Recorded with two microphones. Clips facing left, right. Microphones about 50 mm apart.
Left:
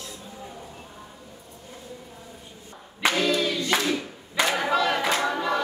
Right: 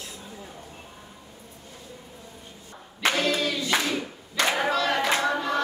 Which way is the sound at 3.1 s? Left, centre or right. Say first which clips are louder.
Left 1 dB; right.